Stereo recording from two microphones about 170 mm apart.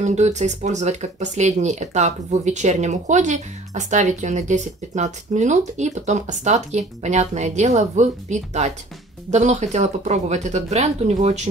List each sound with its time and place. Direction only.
0.0 s speech: 45° right (ahead or behind)